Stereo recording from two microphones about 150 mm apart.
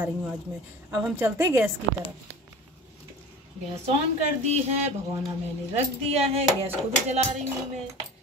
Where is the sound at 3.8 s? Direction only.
45° right (ahead or behind).